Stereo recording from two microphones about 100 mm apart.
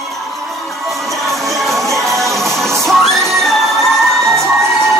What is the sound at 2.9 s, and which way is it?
Music, centre (ahead or behind).